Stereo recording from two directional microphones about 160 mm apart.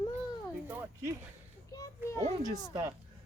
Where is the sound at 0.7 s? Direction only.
15° right (ahead or behind).